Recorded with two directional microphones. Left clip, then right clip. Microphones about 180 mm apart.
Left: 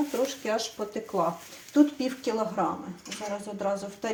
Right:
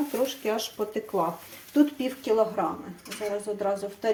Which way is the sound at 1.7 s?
Centre (ahead or behind).